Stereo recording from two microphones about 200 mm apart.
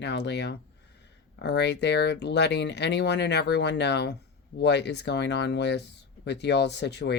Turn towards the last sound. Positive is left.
turn(degrees=60)  # may be behind; listen again after turning